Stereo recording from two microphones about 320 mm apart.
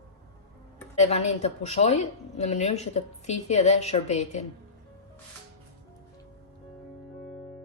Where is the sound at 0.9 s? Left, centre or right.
Centre.